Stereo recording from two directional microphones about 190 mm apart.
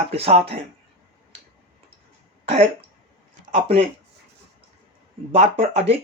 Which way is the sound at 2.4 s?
35° right (ahead or behind).